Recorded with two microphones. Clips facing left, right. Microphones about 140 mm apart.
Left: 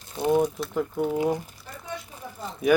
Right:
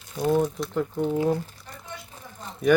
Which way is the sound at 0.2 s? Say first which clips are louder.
Left 1 dB; 15° left (ahead or behind).